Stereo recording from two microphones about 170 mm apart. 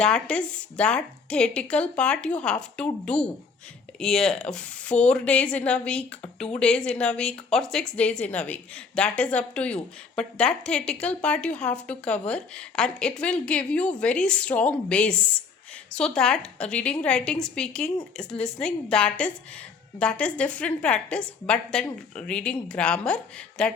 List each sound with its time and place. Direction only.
0.0 s a woman's voice: 5° left (ahead or behind)